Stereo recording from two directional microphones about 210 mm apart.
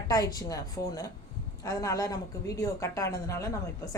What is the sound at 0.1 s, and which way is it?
Speech, 15° left (ahead or behind).